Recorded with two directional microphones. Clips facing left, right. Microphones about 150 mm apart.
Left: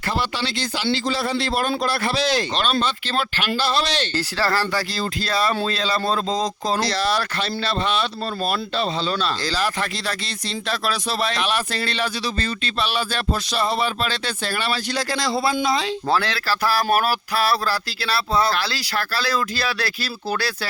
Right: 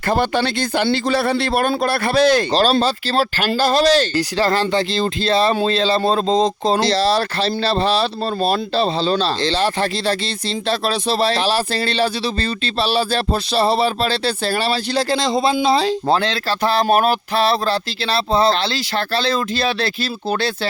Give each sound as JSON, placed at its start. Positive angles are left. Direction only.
{"t": 0.1, "sound": "a man's voice", "side_deg": -50}
{"t": 2.5, "sound": "speech", "side_deg": -35}
{"t": 4.1, "sound": "speech", "side_deg": -15}
{"t": 15.6, "sound": "speech", "side_deg": -35}
{"t": 16.0, "sound": "speech", "side_deg": -20}